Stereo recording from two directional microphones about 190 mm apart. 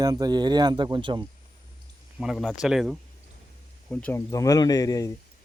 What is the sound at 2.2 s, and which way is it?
Speech, centre (ahead or behind).